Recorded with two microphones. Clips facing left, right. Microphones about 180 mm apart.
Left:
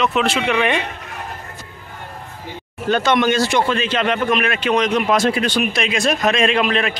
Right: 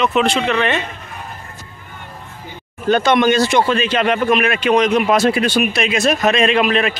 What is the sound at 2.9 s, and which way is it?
A man's voice, 15° right (ahead or behind).